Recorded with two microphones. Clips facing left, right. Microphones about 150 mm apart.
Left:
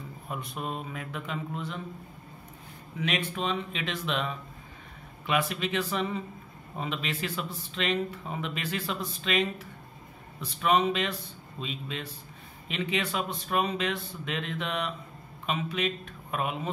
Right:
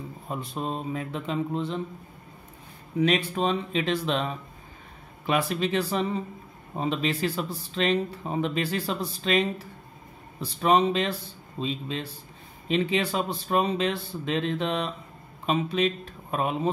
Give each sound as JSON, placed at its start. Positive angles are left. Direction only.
{"t": 0.3, "sound": "speech", "side_deg": -30}
{"t": 3.0, "sound": "speech", "side_deg": -35}